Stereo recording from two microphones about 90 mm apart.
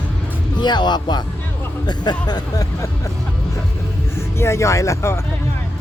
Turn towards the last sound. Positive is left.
turn(degrees=35)  # may be behind; listen again after turning